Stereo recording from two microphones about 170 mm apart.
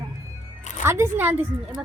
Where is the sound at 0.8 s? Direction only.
15° right (ahead or behind).